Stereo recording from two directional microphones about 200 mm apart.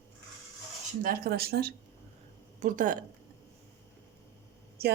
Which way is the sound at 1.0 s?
45° right (ahead or behind).